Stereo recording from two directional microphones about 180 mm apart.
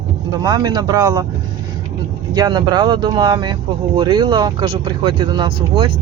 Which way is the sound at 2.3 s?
25° right (ahead or behind).